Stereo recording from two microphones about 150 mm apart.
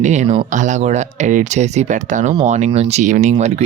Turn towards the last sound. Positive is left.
turn(degrees=-50)  # may be behind; listen again after turning